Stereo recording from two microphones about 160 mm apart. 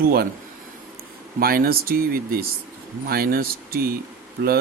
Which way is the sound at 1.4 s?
65° right (ahead or behind).